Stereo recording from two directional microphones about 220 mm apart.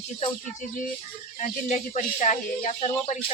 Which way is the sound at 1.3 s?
35° left (ahead or behind).